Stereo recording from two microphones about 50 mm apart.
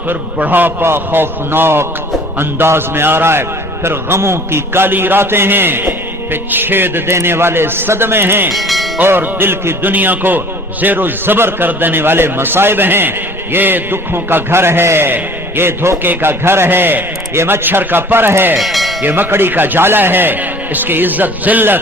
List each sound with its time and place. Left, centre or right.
0.1 s a man's voice: right
7.1 s a man's voice: right
8.5 s speech: centre
9.0 s a man's voice: right
18.6 s a sound: centre
19.0 s a man's voice: right